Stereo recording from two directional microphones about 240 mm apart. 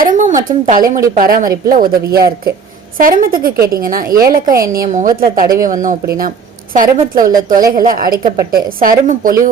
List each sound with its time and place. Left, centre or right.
0.0 s a sound: right
1.1 s a woman's voice: right
7.3 s a woman's voice: centre
7.7 s a woman's voice: right